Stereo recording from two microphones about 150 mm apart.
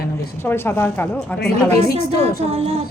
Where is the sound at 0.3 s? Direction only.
15° left (ahead or behind).